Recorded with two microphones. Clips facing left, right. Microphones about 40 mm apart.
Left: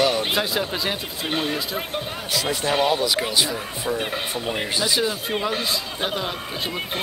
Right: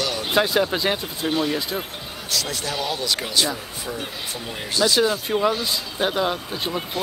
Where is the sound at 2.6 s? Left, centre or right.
Left.